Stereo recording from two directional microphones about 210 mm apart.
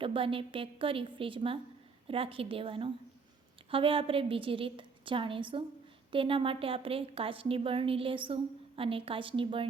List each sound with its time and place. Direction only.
0.0 s a woman's voice: 25° right (ahead or behind)